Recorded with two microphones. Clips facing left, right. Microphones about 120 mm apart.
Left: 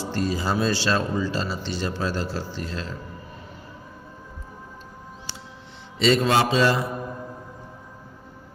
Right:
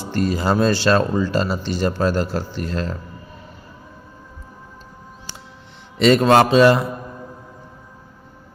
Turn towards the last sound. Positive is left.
turn(degrees=-60)  # may be behind; listen again after turning